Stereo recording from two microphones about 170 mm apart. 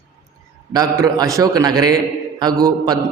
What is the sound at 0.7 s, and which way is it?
A man's voice, 20° right (ahead or behind).